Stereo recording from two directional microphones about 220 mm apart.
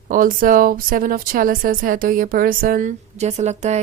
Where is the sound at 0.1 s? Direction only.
40° right (ahead or behind).